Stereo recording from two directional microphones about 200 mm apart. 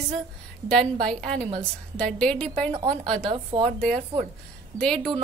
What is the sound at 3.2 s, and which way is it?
Speech, 25° right (ahead or behind).